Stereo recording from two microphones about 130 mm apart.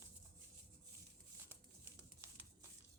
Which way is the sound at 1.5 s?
20° right (ahead or behind).